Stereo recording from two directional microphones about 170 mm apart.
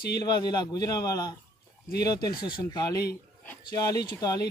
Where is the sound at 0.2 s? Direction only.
25° left (ahead or behind).